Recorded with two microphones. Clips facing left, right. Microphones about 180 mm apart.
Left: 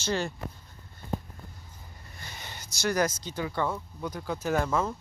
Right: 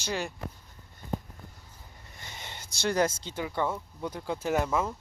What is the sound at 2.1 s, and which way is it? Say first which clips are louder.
Speech: even; 20° right (ahead or behind).